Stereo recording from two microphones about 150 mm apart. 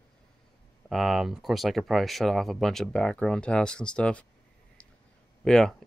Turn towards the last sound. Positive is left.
turn(degrees=5)  # may be behind; listen again after turning